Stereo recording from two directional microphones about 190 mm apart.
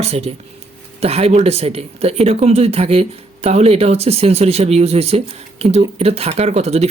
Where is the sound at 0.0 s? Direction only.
35° right (ahead or behind).